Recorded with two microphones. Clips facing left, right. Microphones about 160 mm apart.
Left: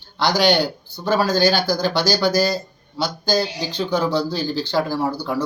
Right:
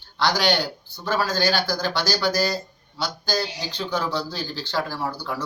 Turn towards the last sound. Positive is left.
turn(degrees=20)  # may be behind; listen again after turning